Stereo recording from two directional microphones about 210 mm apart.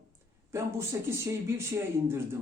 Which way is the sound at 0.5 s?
15° right (ahead or behind).